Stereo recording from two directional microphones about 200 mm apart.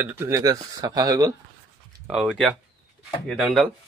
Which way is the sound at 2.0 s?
Centre (ahead or behind).